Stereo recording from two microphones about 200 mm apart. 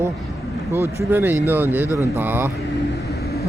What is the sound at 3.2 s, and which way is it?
Vehicle, 50° left (ahead or behind).